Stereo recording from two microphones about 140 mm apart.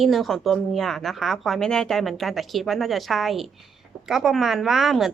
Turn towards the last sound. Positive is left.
turn(degrees=0)  # may be behind; listen again after turning